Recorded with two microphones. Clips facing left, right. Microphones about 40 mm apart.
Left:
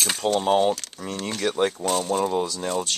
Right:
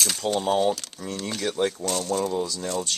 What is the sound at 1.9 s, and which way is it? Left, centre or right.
Speech, centre.